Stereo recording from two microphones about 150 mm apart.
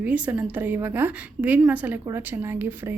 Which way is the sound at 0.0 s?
10° right (ahead or behind).